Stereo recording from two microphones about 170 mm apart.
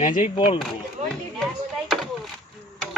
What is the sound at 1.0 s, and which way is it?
Speech, 45° right (ahead or behind).